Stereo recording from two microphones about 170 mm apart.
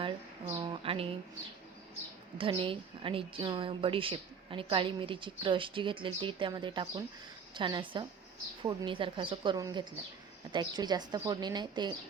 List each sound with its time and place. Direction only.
0.6 s a woman's voice: 30° right (ahead or behind)
2.4 s a woman's voice: 30° right (ahead or behind)